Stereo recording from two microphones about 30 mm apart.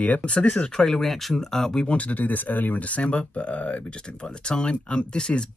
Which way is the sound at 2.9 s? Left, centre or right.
Left.